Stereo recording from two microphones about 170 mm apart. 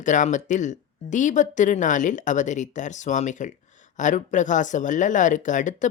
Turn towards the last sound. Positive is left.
turn(degrees=50)  # may be behind; listen again after turning